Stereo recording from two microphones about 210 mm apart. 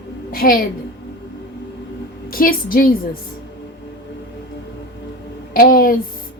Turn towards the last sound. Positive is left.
turn(degrees=40)  # may be behind; listen again after turning